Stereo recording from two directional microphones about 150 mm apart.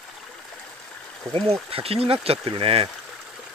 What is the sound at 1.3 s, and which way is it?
Speech, 5° left (ahead or behind).